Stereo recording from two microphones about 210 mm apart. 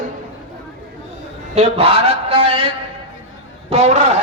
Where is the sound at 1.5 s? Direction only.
30° right (ahead or behind).